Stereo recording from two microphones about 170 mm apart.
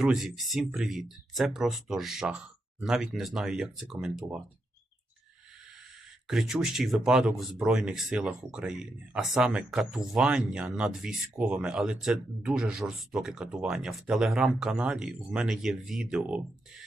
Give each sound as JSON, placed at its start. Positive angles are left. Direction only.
{"t": 0.0, "sound": "speech", "side_deg": -5}
{"t": 6.2, "sound": "speech", "side_deg": 0}